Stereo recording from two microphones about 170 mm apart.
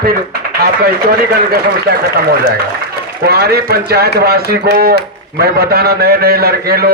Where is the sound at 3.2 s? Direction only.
70° right (ahead or behind).